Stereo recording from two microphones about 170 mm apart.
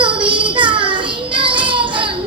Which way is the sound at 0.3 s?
30° right (ahead or behind).